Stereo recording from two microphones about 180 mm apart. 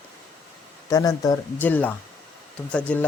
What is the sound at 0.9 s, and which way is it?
Speech, 20° left (ahead or behind).